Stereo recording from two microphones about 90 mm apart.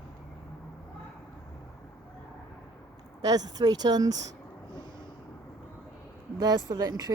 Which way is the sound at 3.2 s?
45° right (ahead or behind).